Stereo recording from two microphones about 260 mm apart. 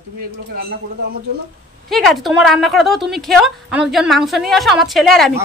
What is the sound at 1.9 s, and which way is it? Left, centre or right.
A woman's voice, centre.